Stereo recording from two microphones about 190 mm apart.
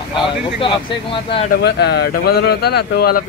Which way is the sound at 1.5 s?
60° left (ahead or behind).